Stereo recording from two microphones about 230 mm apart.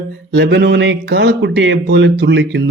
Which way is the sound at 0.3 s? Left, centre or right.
Right.